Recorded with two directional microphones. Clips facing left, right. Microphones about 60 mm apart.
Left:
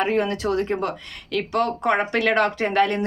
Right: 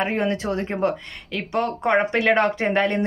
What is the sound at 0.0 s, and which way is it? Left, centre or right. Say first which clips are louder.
Speech: left 1 dB; right.